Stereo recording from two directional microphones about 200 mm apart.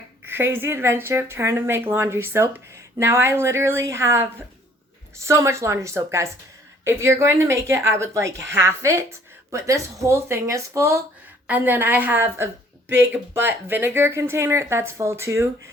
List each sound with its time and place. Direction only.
0.3 s a woman's voice: 10° right (ahead or behind)